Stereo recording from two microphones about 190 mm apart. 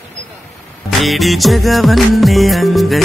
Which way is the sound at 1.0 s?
Centre (ahead or behind).